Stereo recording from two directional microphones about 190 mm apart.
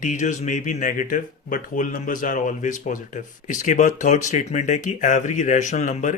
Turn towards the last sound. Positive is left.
turn(degrees=40)  # may be behind; listen again after turning